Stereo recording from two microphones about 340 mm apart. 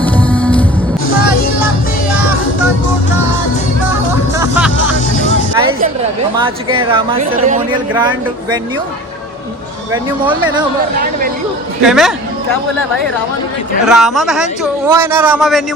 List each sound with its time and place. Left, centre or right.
0.0 s music: centre
4.4 s music: centre
6.3 s a woman's voice: centre
9.9 s a woman's voice: centre
11.8 s a man's voice: centre
13.8 s a man's voice: centre